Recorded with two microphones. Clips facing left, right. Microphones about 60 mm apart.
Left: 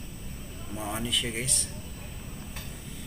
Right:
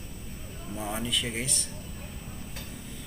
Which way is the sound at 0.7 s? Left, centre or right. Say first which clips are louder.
Even; centre.